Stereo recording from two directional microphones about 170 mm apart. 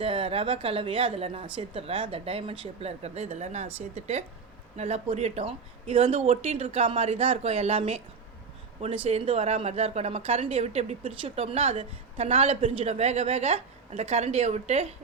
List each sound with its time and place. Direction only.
0.0 s a woman's voice: 35° right (ahead or behind)